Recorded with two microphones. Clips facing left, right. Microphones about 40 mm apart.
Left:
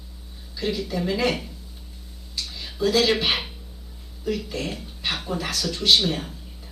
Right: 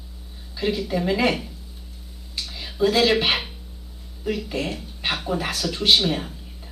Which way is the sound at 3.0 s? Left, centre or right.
Centre.